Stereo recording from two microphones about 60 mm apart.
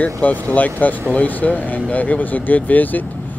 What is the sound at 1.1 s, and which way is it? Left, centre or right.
Speech, left.